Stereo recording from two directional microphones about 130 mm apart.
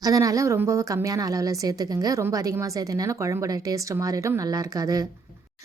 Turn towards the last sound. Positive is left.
turn(degrees=-25)  # may be behind; listen again after turning